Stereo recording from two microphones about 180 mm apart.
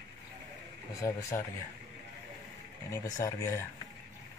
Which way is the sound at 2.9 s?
20° left (ahead or behind).